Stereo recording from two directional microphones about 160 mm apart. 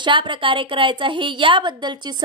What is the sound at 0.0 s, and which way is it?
A woman's voice, 30° right (ahead or behind).